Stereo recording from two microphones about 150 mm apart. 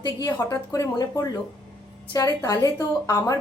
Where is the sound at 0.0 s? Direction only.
30° left (ahead or behind).